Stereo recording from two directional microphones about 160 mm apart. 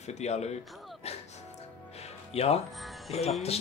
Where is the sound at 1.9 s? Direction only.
40° left (ahead or behind).